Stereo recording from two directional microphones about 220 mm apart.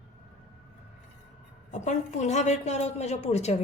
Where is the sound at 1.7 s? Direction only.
30° left (ahead or behind).